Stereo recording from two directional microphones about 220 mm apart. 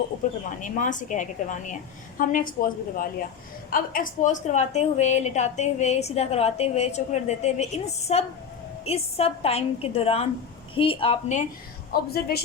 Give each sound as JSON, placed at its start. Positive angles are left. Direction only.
{"t": 0.6, "sound": "a woman's voice", "side_deg": 35}
{"t": 11.9, "sound": "a woman's voice", "side_deg": 45}